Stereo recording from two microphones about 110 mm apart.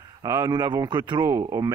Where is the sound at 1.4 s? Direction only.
35° right (ahead or behind).